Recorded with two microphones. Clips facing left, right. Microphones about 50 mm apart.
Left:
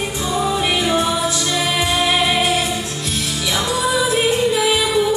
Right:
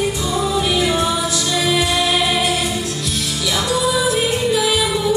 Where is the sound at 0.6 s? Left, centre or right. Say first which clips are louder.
Even; left.